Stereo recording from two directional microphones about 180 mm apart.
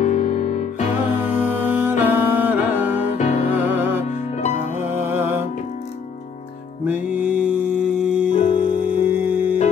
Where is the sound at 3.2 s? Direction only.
40° left (ahead or behind).